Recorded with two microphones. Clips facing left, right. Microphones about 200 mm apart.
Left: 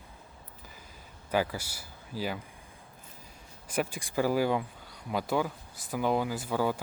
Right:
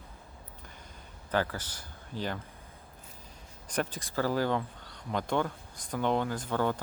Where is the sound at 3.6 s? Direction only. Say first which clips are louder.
Left 1 dB; 10° left (ahead or behind).